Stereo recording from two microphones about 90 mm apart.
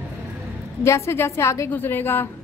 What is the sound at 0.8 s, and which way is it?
Speech, 30° left (ahead or behind).